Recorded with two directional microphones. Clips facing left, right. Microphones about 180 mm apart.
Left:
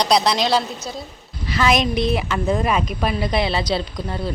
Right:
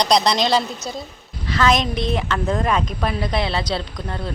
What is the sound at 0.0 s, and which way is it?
Speech, 5° left (ahead or behind).